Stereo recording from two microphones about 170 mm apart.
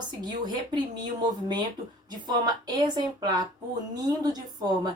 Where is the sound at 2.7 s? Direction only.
25° right (ahead or behind).